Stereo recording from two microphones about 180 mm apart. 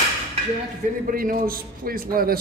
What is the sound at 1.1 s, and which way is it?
A man's voice, 50° right (ahead or behind).